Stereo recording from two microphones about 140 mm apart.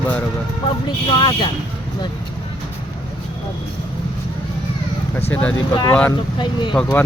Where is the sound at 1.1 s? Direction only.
35° left (ahead or behind).